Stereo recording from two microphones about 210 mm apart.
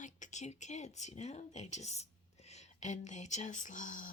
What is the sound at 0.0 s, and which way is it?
Speech, 35° left (ahead or behind).